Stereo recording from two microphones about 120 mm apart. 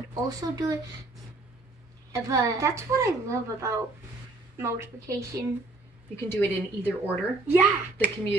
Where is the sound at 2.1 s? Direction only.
25° right (ahead or behind).